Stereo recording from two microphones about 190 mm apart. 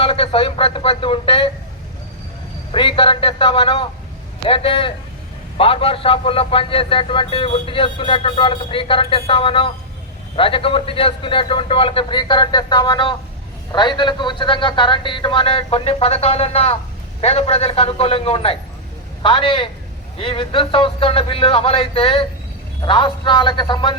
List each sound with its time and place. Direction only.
0.0 s a man's voice: 30° left (ahead or behind)
2.7 s a man's voice: 25° left (ahead or behind)